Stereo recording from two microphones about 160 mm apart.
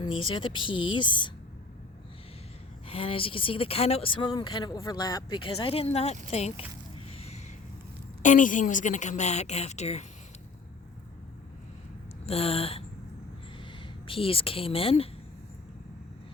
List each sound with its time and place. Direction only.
0.0 s speech: 30° left (ahead or behind)
2.8 s speech: 35° left (ahead or behind)
7.1 s a sound: 40° left (ahead or behind)
8.2 s a woman's voice: 50° left (ahead or behind)
12.2 s speech: 40° left (ahead or behind)